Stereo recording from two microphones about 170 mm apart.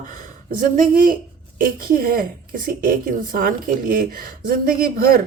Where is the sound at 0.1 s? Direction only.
50° right (ahead or behind).